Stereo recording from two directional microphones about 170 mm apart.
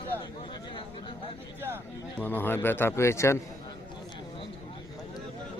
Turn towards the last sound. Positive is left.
turn(degrees=30)  # may be behind; listen again after turning